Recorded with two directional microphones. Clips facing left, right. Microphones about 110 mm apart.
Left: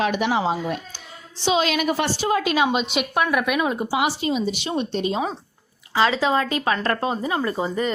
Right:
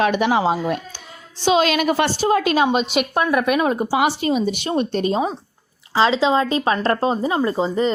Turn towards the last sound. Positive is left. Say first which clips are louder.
# right 4 dB
turn(degrees=-25)  # may be behind; listen again after turning